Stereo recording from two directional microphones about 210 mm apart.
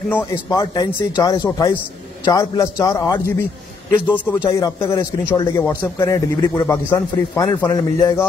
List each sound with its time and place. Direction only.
0.1 s a man's voice: 15° left (ahead or behind)
4.3 s a man's voice: 15° left (ahead or behind)